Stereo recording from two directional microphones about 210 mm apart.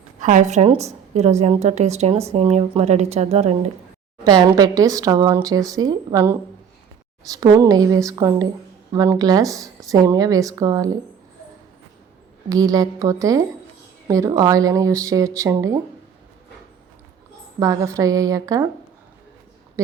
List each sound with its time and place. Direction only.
0.2 s a woman's voice: 40° right (ahead or behind)
4.3 s speech: 20° right (ahead or behind)
12.5 s speech: 15° right (ahead or behind)
17.6 s speech: 15° right (ahead or behind)